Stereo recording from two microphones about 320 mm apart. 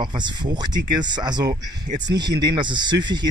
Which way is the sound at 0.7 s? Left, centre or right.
Right.